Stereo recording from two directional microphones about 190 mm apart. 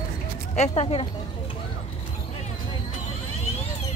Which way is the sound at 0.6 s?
30° left (ahead or behind).